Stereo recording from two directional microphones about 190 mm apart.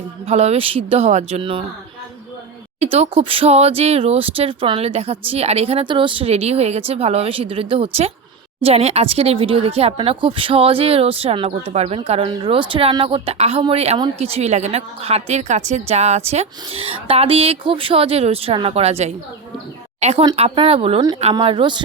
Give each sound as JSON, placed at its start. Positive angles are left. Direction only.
{"t": 0.3, "sound": "speech", "side_deg": -35}
{"t": 2.8, "sound": "a woman's voice", "side_deg": -30}